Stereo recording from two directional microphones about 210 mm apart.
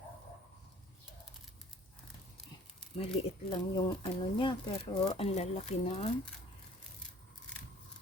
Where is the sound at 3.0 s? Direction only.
25° left (ahead or behind).